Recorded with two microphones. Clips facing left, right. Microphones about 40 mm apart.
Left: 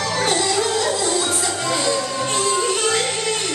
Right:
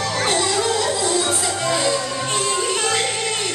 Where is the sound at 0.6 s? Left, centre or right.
Centre.